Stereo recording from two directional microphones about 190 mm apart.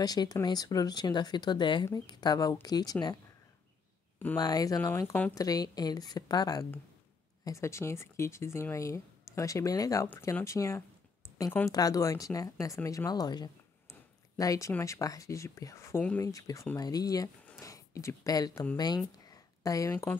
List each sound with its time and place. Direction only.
0.0 s speech: 20° left (ahead or behind)
4.4 s speech: 20° left (ahead or behind)
19.1 s a sound: 20° left (ahead or behind)